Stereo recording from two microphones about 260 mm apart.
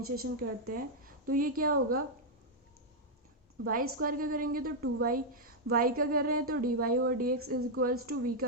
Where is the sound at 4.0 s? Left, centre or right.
Right.